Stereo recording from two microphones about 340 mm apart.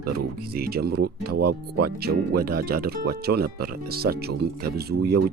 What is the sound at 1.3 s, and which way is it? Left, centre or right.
Speech, right.